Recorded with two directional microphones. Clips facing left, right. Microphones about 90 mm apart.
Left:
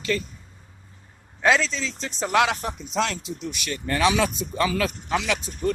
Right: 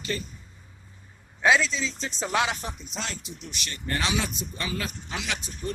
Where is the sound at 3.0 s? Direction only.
90° left.